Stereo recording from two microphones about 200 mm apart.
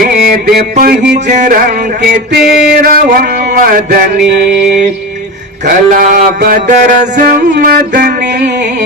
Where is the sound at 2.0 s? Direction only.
55° right (ahead or behind).